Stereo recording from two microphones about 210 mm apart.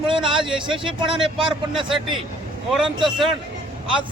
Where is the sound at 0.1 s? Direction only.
25° right (ahead or behind).